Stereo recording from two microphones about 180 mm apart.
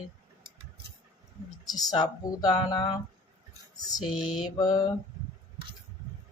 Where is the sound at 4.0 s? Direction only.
5° right (ahead or behind).